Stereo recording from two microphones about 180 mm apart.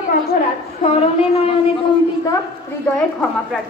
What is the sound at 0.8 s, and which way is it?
Speech, 35° left (ahead or behind).